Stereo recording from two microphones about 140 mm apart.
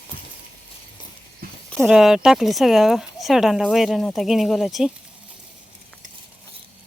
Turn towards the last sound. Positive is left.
turn(degrees=-5)  # may be behind; listen again after turning